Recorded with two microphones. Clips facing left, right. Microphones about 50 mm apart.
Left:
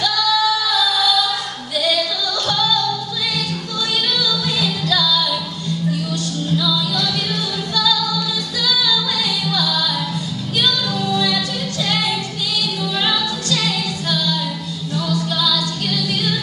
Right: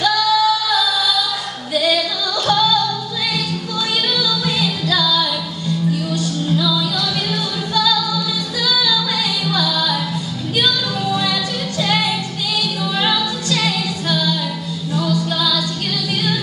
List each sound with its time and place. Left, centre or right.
0.0 s female singing: centre
1.8 s music: centre
4.1 s music: centre
12.8 s music: centre
15.0 s a capella: centre